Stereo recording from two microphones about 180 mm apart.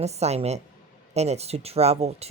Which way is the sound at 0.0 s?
35° right (ahead or behind).